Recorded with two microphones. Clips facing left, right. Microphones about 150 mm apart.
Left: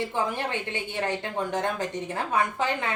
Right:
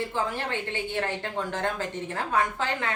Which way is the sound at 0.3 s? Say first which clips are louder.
Even; 15° left (ahead or behind).